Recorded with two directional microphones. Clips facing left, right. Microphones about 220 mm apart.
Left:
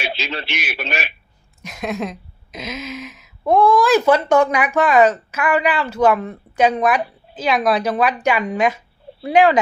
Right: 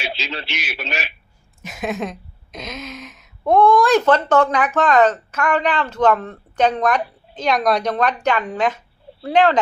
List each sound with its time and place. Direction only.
0.0 s a man's voice: 60° left (ahead or behind)
1.6 s a woman's voice: centre (ahead or behind)